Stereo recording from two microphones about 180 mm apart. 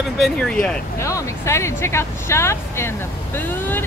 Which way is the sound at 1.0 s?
15° left (ahead or behind).